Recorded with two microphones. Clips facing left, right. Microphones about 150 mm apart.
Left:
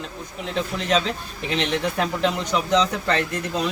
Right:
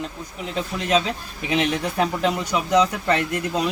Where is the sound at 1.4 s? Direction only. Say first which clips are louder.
Right 2 dB; 10° right (ahead or behind).